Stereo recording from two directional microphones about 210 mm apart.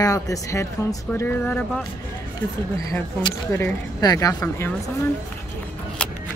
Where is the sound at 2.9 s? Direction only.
20° left (ahead or behind).